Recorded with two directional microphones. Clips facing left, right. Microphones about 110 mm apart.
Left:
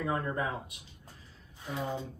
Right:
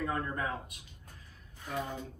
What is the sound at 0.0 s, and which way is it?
A woman's voice, 20° left (ahead or behind).